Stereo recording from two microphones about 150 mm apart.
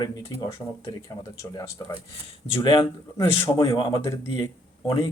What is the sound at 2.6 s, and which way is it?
Speech, 25° left (ahead or behind).